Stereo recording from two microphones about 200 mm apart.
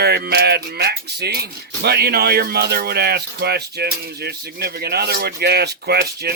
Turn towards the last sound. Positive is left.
turn(degrees=-55)  # may be behind; listen again after turning